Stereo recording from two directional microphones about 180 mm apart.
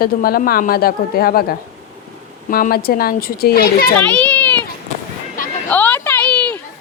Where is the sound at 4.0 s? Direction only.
5° left (ahead or behind).